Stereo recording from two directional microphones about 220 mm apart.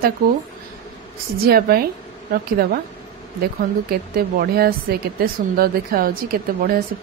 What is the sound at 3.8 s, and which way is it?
A woman's voice, 45° right (ahead or behind).